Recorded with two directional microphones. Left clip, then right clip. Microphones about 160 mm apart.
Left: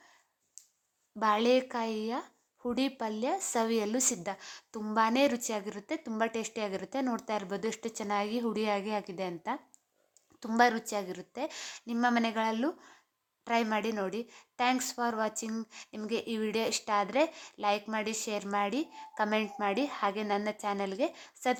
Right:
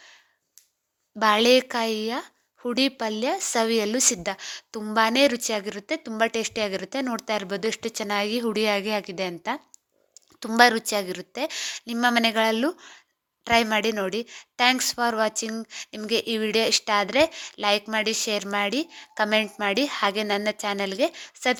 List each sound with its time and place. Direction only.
1.2 s a woman's voice: 25° right (ahead or behind)